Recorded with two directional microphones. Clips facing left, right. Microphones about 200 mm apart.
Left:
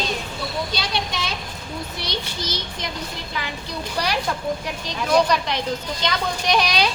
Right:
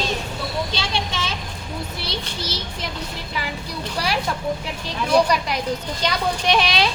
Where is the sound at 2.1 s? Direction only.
30° right (ahead or behind).